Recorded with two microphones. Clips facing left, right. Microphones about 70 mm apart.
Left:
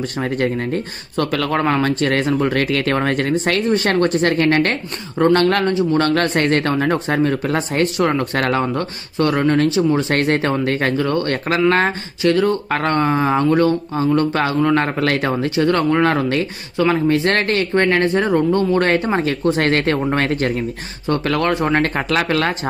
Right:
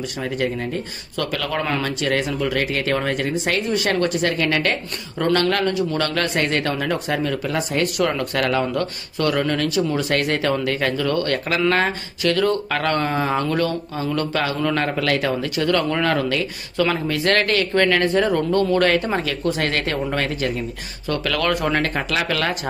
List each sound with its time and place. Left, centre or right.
1.1 s speech: left
3.6 s speech: left
5.7 s speech: left
21.1 s speech: left
21.8 s speech: left